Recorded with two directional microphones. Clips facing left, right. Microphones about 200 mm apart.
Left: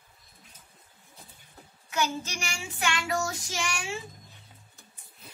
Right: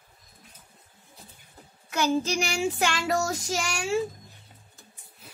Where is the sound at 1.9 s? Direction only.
35° right (ahead or behind).